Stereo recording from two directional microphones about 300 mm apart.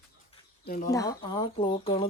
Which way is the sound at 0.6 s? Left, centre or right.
Left.